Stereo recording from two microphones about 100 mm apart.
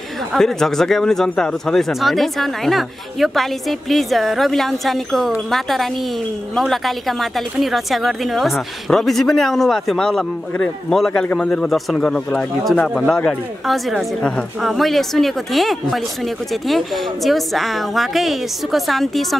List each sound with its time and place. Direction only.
0.3 s speech: 5° left (ahead or behind)